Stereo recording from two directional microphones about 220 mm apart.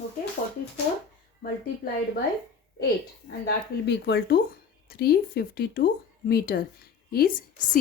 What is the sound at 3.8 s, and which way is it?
Speech, 50° left (ahead or behind).